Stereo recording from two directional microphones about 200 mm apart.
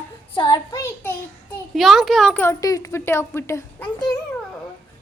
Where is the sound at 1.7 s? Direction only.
Centre (ahead or behind).